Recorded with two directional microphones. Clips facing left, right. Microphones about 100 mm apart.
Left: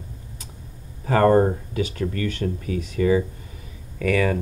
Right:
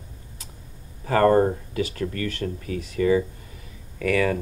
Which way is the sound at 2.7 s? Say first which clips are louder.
Left 3 dB; 35° right (ahead or behind).